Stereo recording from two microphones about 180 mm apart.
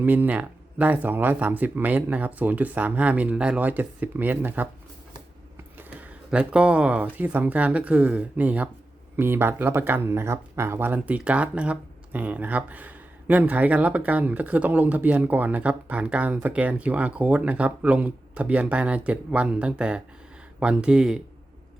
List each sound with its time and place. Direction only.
0.0 s speech: 10° right (ahead or behind)
5.7 s speech: 10° right (ahead or behind)